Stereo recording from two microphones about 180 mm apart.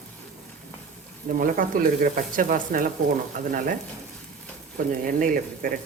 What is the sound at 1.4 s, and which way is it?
Speech, 50° right (ahead or behind).